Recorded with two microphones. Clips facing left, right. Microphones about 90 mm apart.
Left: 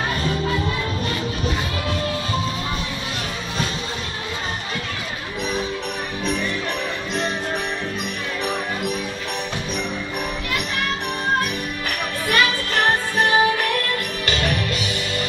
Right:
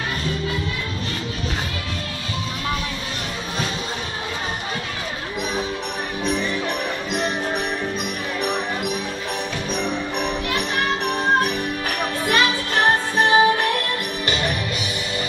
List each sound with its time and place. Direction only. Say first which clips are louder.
8.4 s music: right 1 dB; 10° right (ahead or behind)
12.3 s music: left 1 dB; 20° right (ahead or behind)
14.2 s music: left 1 dB; 10° right (ahead or behind)